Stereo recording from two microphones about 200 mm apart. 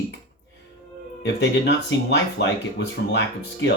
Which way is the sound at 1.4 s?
60° left (ahead or behind).